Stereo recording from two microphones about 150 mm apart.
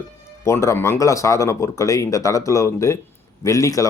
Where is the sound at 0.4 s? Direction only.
20° left (ahead or behind).